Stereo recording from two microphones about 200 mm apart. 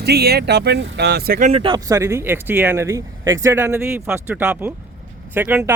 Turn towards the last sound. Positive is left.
turn(degrees=-10)  # may be behind; listen again after turning